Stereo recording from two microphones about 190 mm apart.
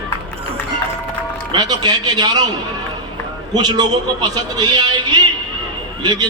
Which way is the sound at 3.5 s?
20° right (ahead or behind).